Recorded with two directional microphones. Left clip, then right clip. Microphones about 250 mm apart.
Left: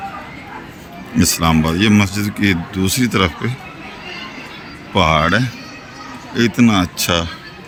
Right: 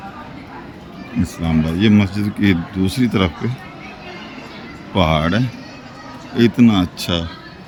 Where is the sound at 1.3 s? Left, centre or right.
Centre.